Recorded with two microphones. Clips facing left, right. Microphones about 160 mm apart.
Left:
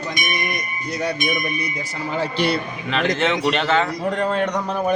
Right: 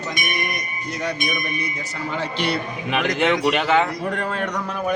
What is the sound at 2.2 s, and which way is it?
Speech, 35° left (ahead or behind).